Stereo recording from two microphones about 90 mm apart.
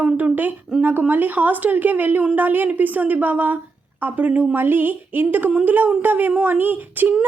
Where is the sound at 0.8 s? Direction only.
20° right (ahead or behind).